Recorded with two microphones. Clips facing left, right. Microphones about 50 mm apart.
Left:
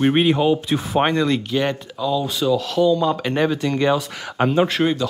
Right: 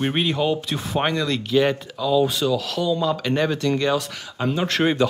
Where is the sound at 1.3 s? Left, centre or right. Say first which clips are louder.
Right 2 dB; centre.